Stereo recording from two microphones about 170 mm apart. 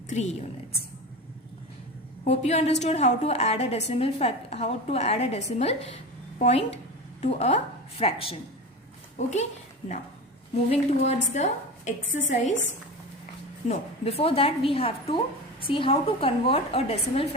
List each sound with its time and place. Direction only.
0.1 s a woman's voice: 40° left (ahead or behind)
2.2 s a woman's voice: 40° left (ahead or behind)
10.5 s a woman's voice: 40° left (ahead or behind)
13.7 s a woman's voice: 35° left (ahead or behind)